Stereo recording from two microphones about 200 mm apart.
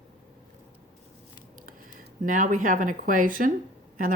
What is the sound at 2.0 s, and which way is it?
Speech, 40° right (ahead or behind).